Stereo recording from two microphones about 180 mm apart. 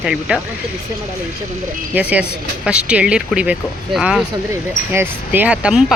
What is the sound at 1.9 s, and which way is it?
Speech, 5° right (ahead or behind).